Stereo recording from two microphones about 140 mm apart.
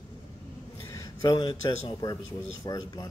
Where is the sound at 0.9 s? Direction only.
25° left (ahead or behind).